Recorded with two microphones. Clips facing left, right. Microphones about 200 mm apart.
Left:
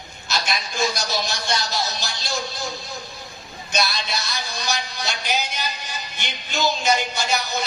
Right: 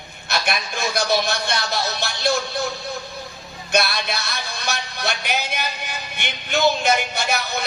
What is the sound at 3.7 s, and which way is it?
A man's voice, 55° right (ahead or behind).